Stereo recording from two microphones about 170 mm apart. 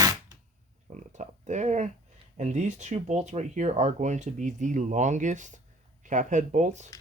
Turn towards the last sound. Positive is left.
turn(degrees=-45)  # may be behind; listen again after turning